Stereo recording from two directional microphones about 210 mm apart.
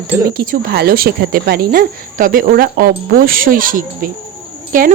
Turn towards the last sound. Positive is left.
turn(degrees=-40)  # may be behind; listen again after turning